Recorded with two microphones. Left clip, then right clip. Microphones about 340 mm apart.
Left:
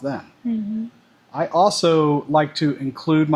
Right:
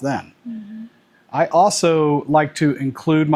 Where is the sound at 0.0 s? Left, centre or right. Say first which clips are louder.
Right 4 dB; right.